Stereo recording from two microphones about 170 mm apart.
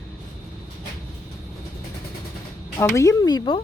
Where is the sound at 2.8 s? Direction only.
20° left (ahead or behind).